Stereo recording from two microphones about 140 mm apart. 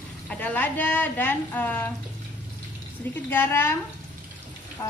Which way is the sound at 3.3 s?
15° left (ahead or behind).